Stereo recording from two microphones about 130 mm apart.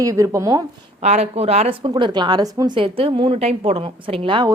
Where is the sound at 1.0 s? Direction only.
55° right (ahead or behind).